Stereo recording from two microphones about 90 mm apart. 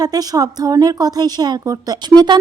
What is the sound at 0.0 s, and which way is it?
A woman's voice, 45° right (ahead or behind).